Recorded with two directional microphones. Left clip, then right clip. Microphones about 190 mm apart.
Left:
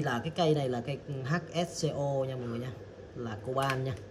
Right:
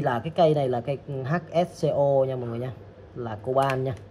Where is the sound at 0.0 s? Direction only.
Centre (ahead or behind).